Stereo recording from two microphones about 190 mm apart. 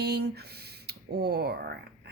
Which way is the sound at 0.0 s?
60° right (ahead or behind).